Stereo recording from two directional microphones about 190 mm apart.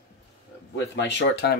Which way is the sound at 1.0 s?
65° left (ahead or behind).